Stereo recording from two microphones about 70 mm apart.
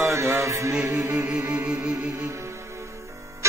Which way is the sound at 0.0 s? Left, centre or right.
Right.